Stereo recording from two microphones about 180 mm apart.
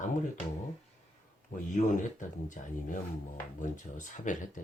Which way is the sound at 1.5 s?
50° left (ahead or behind).